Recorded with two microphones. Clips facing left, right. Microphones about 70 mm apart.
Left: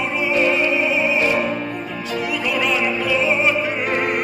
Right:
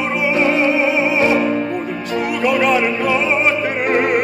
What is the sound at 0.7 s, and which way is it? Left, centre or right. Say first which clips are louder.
Music: right 3 dB; right.